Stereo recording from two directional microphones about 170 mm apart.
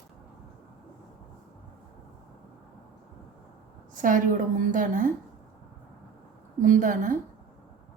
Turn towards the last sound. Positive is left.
turn(degrees=-50)  # may be behind; listen again after turning